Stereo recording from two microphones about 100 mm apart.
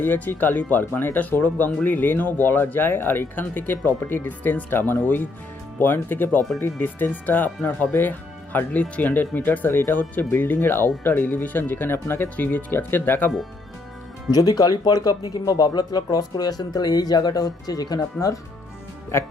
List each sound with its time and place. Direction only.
0.0 s speech: 20° left (ahead or behind)
14.3 s speech: 40° left (ahead or behind)
19.1 s speech: 25° left (ahead or behind)